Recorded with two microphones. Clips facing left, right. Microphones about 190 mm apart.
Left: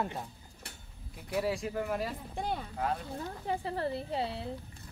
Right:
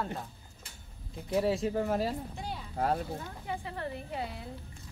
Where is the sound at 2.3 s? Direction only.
55° left (ahead or behind).